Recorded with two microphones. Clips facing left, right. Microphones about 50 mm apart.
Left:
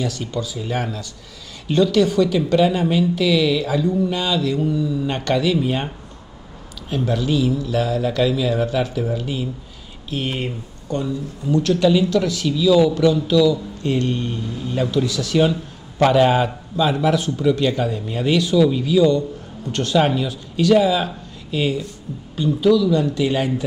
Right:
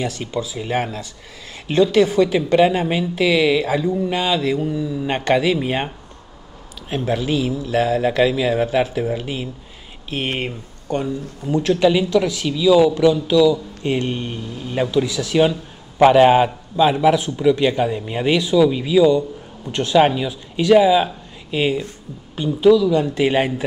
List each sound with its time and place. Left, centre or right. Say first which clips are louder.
0.0 s a woman's voice: right 1 dB; right
5.0 s a woman's voice: right 5 dB; right
7.1 s a woman's voice: left 1 dB; right
11.4 s a woman's voice: right 1 dB; right
21.7 s speech: right 1 dB; right
22.7 s a woman's voice: right 3 dB; right